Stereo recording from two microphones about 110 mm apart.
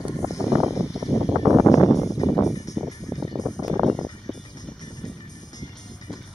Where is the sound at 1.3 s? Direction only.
30° right (ahead or behind).